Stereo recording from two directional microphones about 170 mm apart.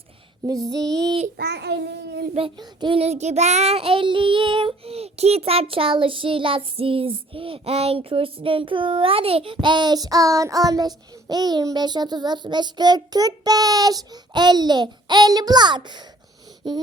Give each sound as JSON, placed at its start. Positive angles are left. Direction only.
{"t": 0.4, "sound": "child singing", "side_deg": -20}
{"t": 1.4, "sound": "child singing", "side_deg": -80}
{"t": 2.3, "sound": "child singing", "side_deg": -30}